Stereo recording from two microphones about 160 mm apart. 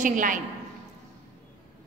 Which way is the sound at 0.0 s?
55° right (ahead or behind).